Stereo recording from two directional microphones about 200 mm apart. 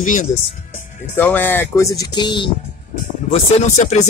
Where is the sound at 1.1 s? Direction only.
10° left (ahead or behind).